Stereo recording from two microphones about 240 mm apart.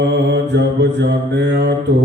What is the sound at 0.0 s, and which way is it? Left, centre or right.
Mantra, right.